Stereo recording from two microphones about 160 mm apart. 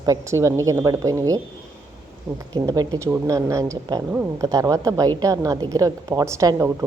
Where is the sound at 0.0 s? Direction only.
20° right (ahead or behind).